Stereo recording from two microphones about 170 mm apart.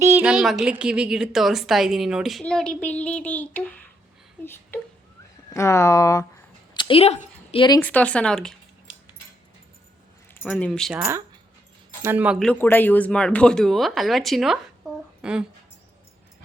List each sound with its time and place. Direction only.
0.0 s a woman's voice: 10° right (ahead or behind); by 6.2 s 20° left (ahead or behind)
6.7 s a woman's voice: 30° left (ahead or behind)
7.8 s speech: 10° left (ahead or behind)
10.3 s speech: 10° left (ahead or behind)
10.9 s speech: 15° right (ahead or behind)
12.4 s a woman's voice: 10° left (ahead or behind)